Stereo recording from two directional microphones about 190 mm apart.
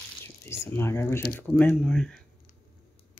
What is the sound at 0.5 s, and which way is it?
Speech, 10° left (ahead or behind).